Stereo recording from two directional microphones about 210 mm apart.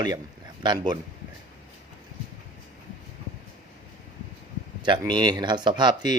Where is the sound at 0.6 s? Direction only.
20° right (ahead or behind).